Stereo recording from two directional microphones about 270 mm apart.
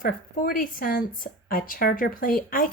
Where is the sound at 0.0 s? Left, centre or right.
Left.